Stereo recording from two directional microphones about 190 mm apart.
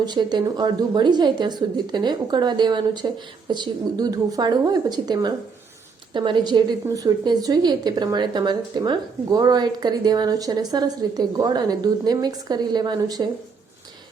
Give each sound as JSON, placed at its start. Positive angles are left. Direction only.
{"t": 0.0, "sound": "a woman's voice", "side_deg": -20}